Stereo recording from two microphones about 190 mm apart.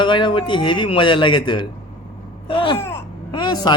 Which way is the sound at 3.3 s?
25° left (ahead or behind).